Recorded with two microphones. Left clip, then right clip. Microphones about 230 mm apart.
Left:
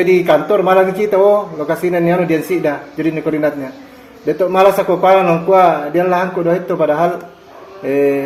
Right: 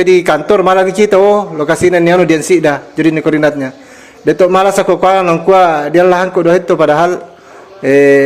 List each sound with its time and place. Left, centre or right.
0.0 s a man's voice: right